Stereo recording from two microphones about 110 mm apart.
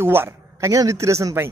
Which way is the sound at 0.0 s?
20° right (ahead or behind).